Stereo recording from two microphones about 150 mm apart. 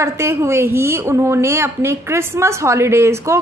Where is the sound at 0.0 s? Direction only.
20° right (ahead or behind).